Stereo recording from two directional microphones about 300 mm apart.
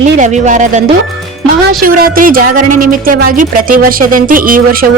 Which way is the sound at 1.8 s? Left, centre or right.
Right.